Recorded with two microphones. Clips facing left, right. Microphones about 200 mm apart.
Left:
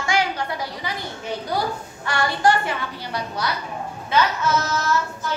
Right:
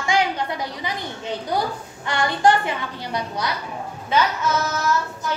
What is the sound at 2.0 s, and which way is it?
A woman's voice, 20° right (ahead or behind).